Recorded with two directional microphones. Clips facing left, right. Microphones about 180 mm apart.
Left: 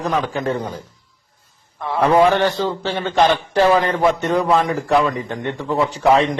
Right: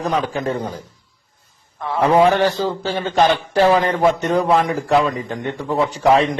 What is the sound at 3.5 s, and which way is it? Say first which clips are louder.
Speech: even; 30° right (ahead or behind).